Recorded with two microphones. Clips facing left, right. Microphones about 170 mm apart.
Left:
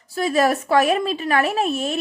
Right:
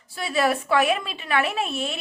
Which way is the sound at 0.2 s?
40° left (ahead or behind).